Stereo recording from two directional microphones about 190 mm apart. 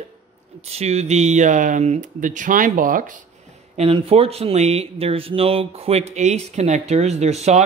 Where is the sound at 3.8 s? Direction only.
30° right (ahead or behind).